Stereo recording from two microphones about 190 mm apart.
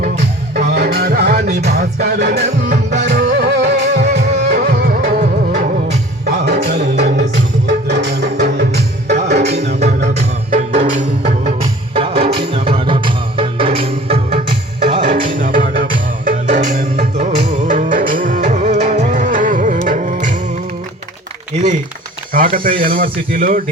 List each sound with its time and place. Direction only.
0.5 s music: 60° right (ahead or behind)
2.4 s music: 35° right (ahead or behind)
3.0 s music: 55° right (ahead or behind)
9.4 s music: 35° right (ahead or behind)
11.3 s music: 30° right (ahead or behind)
22.3 s a sound: 45° right (ahead or behind)
22.8 s speech: 50° right (ahead or behind)